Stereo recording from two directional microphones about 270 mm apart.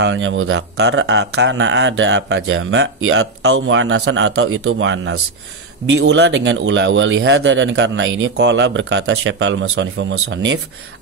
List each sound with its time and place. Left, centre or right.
0.0 s speech: right